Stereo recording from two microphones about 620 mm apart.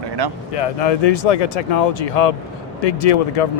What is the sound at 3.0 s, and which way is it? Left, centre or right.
Speech, left.